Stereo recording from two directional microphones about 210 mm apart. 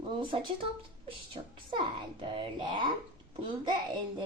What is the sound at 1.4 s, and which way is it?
A woman's voice, 25° right (ahead or behind).